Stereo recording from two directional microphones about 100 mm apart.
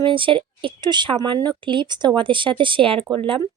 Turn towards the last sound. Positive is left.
turn(degrees=-60)  # may be behind; listen again after turning